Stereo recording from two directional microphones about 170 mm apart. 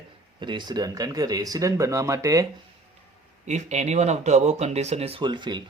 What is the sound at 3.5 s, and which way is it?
Speech, 40° right (ahead or behind).